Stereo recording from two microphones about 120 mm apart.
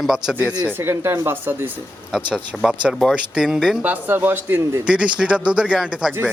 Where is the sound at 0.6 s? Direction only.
20° right (ahead or behind).